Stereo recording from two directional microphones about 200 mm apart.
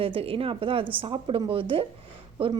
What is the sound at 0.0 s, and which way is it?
A woman's voice, 25° right (ahead or behind).